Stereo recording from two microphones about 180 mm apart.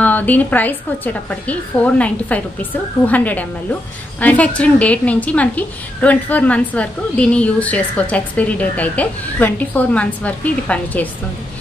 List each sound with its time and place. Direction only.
0.0 s a woman's voice: 10° left (ahead or behind)